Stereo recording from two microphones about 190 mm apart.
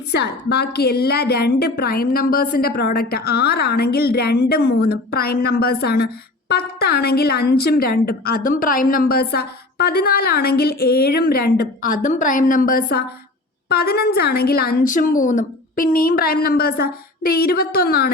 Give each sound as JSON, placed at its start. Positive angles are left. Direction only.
{"t": 0.1, "sound": "a woman's voice", "side_deg": 60}